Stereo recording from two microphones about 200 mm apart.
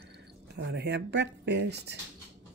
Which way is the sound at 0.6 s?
55° right (ahead or behind).